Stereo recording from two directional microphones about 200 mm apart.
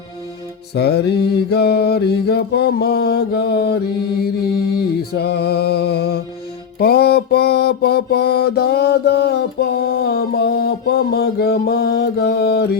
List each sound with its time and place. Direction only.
0.7 s mantra: 55° left (ahead or behind)
4.8 s music: 55° left (ahead or behind)